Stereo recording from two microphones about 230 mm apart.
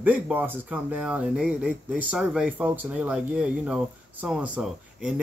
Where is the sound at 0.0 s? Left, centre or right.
Centre.